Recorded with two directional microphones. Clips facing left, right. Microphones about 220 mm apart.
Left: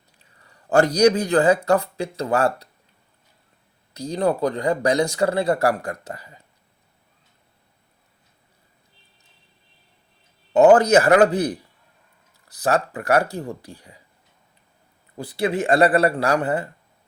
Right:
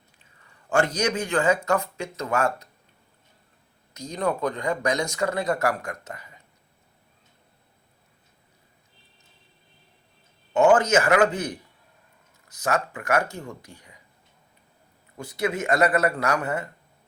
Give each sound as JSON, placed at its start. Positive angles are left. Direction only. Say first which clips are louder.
{"t": 0.2, "sound": "a man's voice", "louder": "left 5 dB", "side_deg": 35}
{"t": 3.9, "sound": "speech", "louder": "left 5 dB", "side_deg": 30}
{"t": 10.5, "sound": "speech", "louder": "left 5 dB", "side_deg": 35}
{"t": 15.2, "sound": "speech", "louder": "left 4 dB", "side_deg": 30}